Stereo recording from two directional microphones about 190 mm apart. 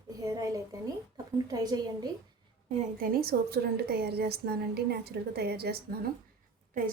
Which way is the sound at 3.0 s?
55° right (ahead or behind).